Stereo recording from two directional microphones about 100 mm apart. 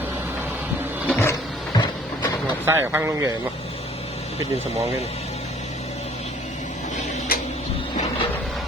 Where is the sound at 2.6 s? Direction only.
25° right (ahead or behind).